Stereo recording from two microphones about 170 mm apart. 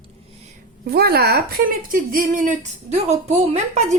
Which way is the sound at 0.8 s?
65° right (ahead or behind).